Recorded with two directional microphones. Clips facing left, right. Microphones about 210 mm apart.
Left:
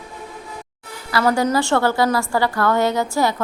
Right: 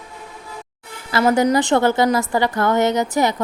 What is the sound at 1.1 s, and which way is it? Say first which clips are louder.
A woman's voice: right 2 dB; 20° right (ahead or behind).